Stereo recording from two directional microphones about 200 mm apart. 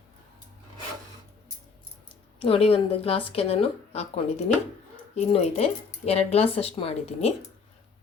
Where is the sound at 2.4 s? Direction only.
30° left (ahead or behind).